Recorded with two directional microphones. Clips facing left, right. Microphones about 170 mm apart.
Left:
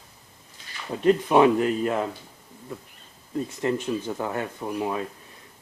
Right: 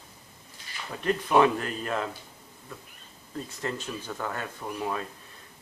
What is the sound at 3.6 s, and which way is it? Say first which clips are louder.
Speech: left 8 dB; 20° left (ahead or behind).